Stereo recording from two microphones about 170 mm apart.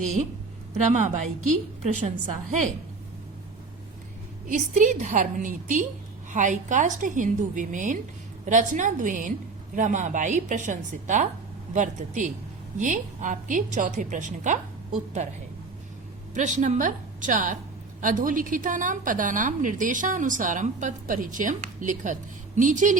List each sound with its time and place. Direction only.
0.0 s a woman's voice: 45° right (ahead or behind)
1.8 s a woman's voice: 45° right (ahead or behind)
4.4 s a woman's voice: 45° right (ahead or behind)
16.3 s a woman's voice: 45° right (ahead or behind)